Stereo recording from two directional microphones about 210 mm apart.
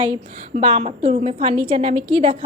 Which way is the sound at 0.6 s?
25° right (ahead or behind).